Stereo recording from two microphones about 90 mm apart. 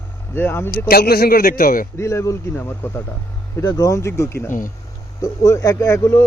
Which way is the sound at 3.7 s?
40° left (ahead or behind).